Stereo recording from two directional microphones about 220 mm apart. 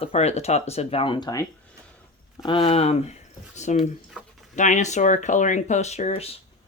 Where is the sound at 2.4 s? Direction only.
25° left (ahead or behind).